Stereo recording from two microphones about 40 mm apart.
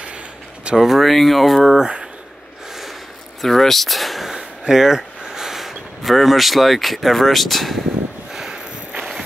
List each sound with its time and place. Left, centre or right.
0.7 s speech: centre
1.8 s speech: right
3.3 s speech: centre
4.4 s speech: centre
8.3 s a sound: centre